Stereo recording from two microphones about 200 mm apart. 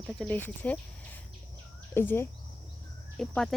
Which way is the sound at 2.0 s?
10° left (ahead or behind).